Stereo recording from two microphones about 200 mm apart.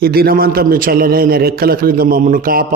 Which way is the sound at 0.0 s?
50° right (ahead or behind).